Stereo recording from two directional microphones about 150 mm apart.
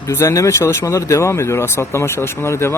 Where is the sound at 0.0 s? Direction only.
20° left (ahead or behind).